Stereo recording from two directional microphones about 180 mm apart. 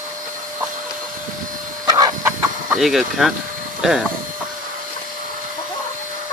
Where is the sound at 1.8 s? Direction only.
20° right (ahead or behind).